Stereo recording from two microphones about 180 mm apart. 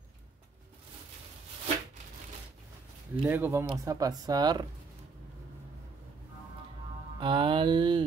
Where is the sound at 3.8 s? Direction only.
20° right (ahead or behind).